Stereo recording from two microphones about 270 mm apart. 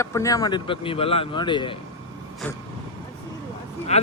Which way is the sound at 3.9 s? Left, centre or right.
Left.